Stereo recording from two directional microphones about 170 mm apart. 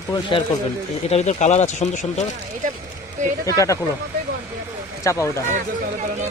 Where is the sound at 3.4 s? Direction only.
20° left (ahead or behind).